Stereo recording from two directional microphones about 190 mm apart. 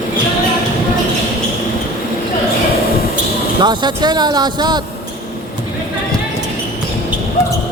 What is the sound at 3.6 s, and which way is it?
Speech, 25° right (ahead or behind).